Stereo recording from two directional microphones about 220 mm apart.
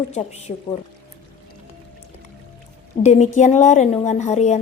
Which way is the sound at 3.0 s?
35° left (ahead or behind).